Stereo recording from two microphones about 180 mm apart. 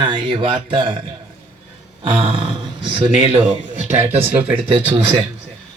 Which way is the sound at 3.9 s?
10° right (ahead or behind).